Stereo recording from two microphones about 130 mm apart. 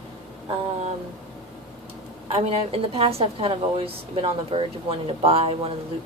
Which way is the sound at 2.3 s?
50° right (ahead or behind).